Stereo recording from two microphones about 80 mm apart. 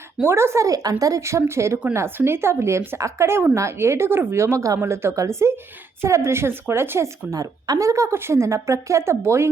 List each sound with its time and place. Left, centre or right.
0.2 s speech: right
7.3 s a woman's voice: right